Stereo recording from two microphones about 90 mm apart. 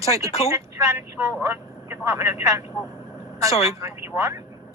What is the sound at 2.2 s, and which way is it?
Speech, 40° right (ahead or behind).